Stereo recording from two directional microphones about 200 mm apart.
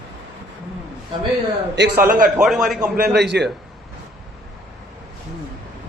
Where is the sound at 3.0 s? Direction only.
55° right (ahead or behind).